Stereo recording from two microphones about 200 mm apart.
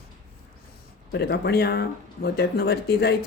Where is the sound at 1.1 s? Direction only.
55° left (ahead or behind).